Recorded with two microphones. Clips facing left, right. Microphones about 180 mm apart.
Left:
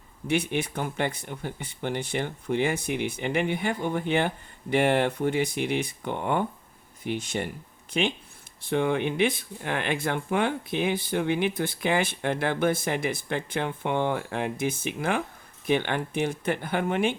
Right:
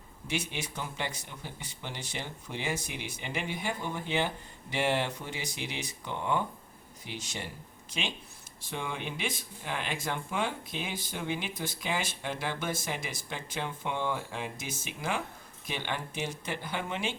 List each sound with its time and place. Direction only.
0.3 s speech: 55° left (ahead or behind)